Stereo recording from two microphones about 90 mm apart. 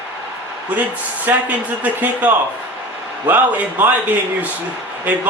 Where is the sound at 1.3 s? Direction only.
20° right (ahead or behind).